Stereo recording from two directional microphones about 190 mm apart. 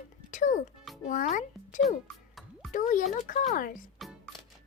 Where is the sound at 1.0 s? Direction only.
40° left (ahead or behind).